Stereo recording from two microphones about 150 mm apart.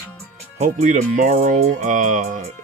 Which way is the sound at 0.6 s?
50° right (ahead or behind).